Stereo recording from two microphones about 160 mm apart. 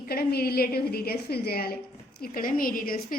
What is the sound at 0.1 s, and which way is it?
A woman's voice, 75° left (ahead or behind).